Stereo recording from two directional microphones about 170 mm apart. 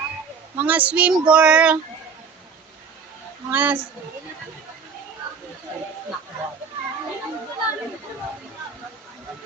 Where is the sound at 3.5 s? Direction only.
10° right (ahead or behind).